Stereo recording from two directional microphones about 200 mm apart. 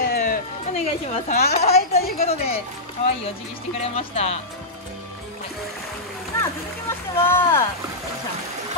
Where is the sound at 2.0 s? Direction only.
50° left (ahead or behind).